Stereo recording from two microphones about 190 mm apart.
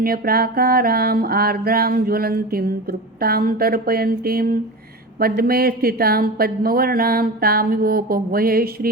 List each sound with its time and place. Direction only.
0.0 s speech: 50° right (ahead or behind)